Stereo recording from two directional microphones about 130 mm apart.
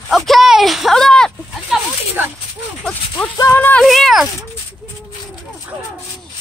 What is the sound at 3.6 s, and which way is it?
Speech, 15° left (ahead or behind).